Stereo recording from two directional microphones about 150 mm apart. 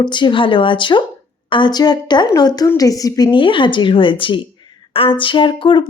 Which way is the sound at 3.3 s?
35° left (ahead or behind).